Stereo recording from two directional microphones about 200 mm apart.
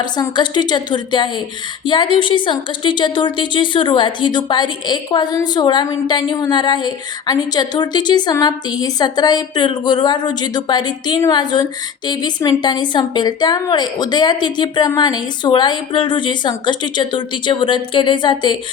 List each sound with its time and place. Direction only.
0.0 s a woman's voice: 20° left (ahead or behind)